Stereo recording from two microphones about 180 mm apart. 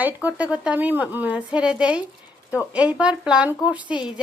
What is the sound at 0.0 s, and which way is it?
A woman's voice, 10° right (ahead or behind).